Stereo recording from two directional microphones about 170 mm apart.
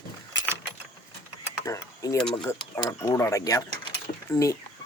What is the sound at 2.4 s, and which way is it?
Speech, 20° left (ahead or behind).